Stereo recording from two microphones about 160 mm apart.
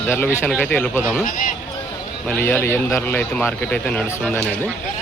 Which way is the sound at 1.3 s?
55° left (ahead or behind).